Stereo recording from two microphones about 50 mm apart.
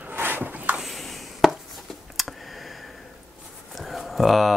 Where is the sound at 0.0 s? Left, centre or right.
Right.